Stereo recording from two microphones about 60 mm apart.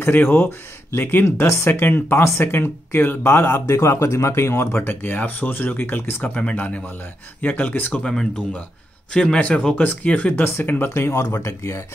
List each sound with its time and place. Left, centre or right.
0.0 s speech: left
1.2 s speech: left
1.7 s speech: left
4.8 s speech: left
6.2 s speech: left
7.9 s speech: centre
10.3 s speech: left
10.9 s speech: left